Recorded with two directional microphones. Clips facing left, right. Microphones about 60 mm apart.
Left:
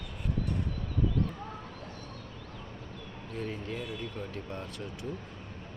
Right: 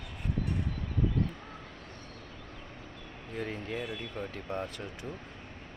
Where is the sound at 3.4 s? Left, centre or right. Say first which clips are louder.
Right 1 dB; right.